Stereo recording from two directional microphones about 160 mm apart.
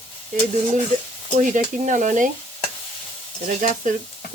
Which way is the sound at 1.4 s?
50° right (ahead or behind).